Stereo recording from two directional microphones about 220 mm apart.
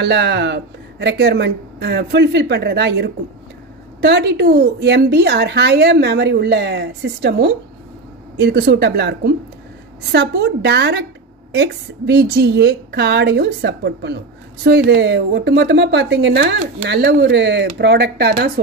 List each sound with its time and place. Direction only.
0.0 s a woman's voice: 50° right (ahead or behind)